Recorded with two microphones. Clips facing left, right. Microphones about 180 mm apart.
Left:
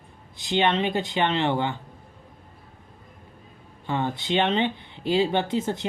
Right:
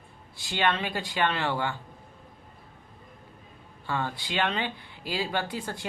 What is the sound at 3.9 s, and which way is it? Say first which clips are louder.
Speech: left 6 dB; 20° left (ahead or behind).